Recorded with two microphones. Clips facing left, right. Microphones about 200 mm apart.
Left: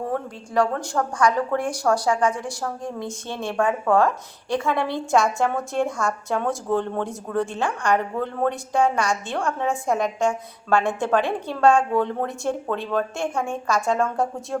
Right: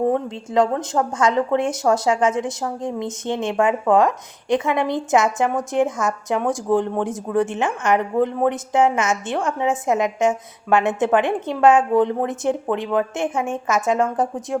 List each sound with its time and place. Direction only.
0.0 s a woman's voice: 20° right (ahead or behind)